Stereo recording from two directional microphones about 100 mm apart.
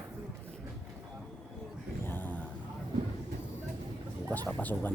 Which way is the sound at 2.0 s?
20° left (ahead or behind).